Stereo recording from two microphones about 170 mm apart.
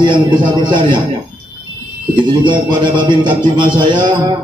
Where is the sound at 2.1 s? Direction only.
30° right (ahead or behind).